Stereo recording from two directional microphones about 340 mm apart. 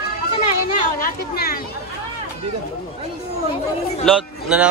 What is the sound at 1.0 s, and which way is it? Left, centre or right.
Speech, left.